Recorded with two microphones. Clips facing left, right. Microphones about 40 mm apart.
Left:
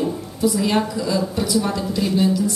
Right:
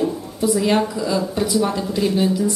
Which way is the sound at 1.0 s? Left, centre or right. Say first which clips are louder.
Right 1 dB; right.